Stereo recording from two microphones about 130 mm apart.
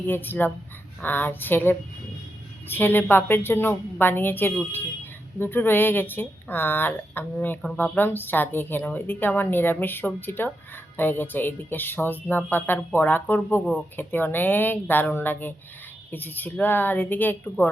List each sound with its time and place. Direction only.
0.0 s speech: 15° left (ahead or behind)